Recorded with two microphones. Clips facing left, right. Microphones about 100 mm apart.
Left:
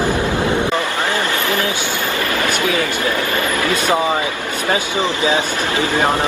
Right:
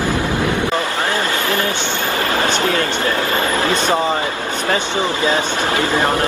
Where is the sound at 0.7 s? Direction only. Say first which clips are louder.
Even; 25° right (ahead or behind).